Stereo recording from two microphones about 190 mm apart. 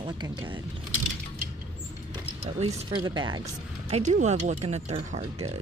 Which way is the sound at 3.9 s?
40° right (ahead or behind).